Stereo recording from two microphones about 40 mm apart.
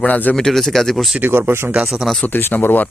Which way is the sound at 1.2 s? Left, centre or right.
Right.